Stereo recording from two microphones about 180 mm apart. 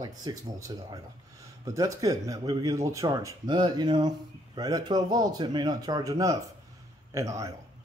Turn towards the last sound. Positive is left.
turn(degrees=-15)  # may be behind; listen again after turning